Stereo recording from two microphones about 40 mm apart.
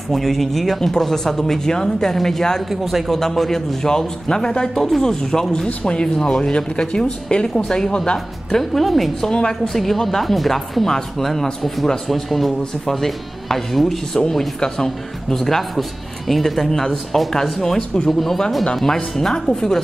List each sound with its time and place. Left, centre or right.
0.1 s speech: centre
2.7 s speech: centre
3.1 s speech: centre
4.7 s speech: centre
5.7 s speech: left
8.7 s speech: centre
9.3 s speech: centre
9.7 s speech: centre
14.1 s speech: centre
18.9 s speech: centre